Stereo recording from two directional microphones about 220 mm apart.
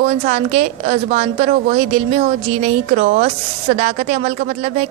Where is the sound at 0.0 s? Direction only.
30° right (ahead or behind).